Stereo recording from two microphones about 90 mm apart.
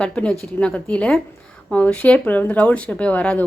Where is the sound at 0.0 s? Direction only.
10° left (ahead or behind).